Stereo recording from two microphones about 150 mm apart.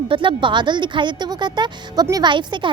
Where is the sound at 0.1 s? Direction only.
35° right (ahead or behind).